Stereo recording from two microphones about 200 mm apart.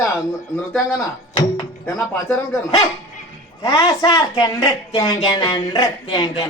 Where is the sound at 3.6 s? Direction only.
15° left (ahead or behind).